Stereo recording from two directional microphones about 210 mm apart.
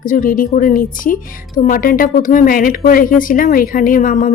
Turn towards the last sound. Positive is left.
turn(degrees=40)  # may be behind; listen again after turning